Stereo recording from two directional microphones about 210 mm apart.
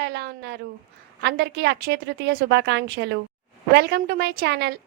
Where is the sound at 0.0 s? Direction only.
50° right (ahead or behind).